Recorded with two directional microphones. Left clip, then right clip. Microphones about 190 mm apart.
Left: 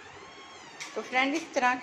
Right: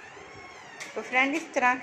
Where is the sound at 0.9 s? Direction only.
5° right (ahead or behind).